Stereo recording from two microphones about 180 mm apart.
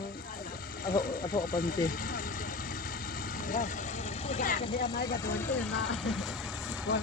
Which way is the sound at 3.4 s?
45° left (ahead or behind).